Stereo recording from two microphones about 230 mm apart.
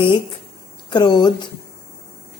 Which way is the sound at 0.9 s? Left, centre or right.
Centre.